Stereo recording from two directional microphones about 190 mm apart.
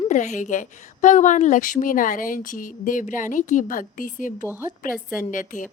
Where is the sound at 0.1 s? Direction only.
40° left (ahead or behind).